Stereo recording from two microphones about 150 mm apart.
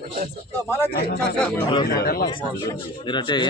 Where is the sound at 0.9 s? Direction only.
90° left.